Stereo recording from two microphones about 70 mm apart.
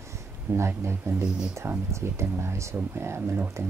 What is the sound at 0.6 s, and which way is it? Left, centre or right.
Speech, right.